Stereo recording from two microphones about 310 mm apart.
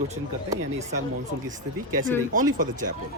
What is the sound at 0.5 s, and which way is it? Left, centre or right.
Speech, right.